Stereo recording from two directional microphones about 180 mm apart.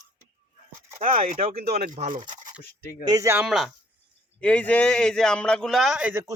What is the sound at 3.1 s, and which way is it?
A man's voice, 15° right (ahead or behind).